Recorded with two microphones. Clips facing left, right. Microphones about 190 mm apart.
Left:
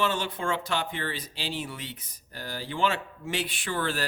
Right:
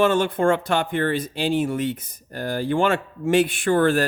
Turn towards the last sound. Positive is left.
turn(degrees=-50)  # may be behind; listen again after turning